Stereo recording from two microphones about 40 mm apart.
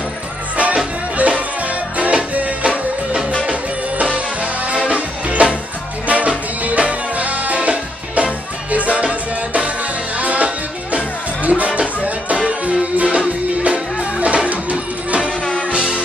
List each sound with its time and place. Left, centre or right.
1.1 s music: right
4.0 s music: right